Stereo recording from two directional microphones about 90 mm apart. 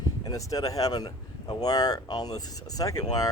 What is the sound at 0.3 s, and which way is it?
Speech, 40° left (ahead or behind).